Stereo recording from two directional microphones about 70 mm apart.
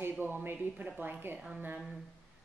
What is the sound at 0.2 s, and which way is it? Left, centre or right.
Speech, right.